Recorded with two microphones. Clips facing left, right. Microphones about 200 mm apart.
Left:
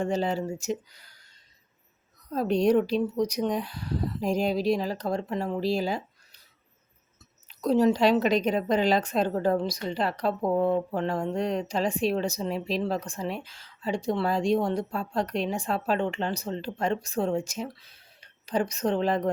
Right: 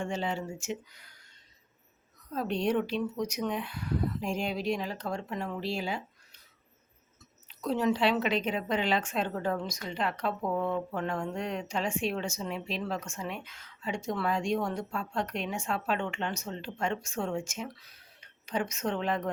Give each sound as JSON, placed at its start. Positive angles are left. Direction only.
{"t": 0.0, "sound": "a woman's voice", "side_deg": 40}
{"t": 2.3, "sound": "a woman's voice", "side_deg": 40}
{"t": 7.4, "sound": "a woman's voice", "side_deg": 40}